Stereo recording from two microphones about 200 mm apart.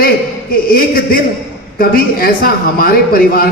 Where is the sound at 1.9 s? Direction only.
45° left (ahead or behind).